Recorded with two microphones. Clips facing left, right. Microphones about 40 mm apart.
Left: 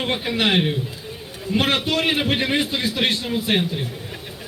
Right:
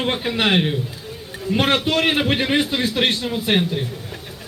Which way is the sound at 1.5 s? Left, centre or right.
Right.